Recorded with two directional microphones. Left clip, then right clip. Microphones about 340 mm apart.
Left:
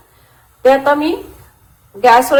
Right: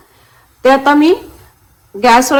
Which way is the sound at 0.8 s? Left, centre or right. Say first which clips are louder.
Right 3 dB; right.